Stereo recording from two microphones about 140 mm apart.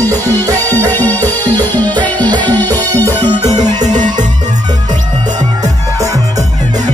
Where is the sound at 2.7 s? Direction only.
25° right (ahead or behind).